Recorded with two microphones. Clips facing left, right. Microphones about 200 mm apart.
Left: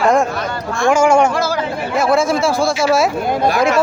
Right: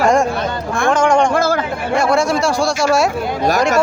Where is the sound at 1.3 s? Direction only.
50° right (ahead or behind).